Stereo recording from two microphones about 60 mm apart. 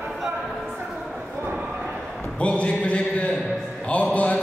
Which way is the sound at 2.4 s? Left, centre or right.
Centre.